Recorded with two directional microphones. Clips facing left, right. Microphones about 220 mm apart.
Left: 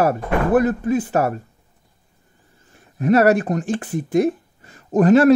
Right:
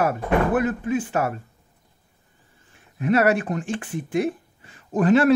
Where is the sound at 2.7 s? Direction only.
40° left (ahead or behind).